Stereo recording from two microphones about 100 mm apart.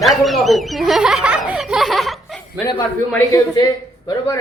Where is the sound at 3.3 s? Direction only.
35° left (ahead or behind).